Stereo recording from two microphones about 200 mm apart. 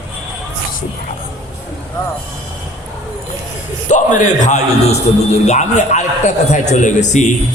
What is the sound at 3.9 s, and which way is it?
A man's voice, 40° left (ahead or behind).